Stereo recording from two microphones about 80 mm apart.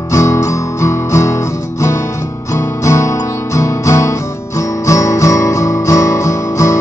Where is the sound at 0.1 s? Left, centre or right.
Left.